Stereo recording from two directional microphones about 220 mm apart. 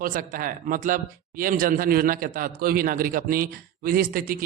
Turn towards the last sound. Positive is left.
turn(degrees=-40)  # may be behind; listen again after turning